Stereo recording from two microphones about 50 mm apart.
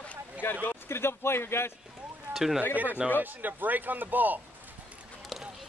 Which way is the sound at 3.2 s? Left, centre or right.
Right.